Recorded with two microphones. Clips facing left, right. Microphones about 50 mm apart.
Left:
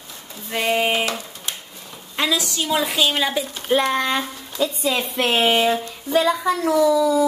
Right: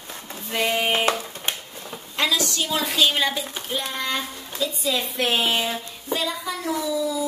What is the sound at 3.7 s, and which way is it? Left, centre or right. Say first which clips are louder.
Speech: left 11 dB; left.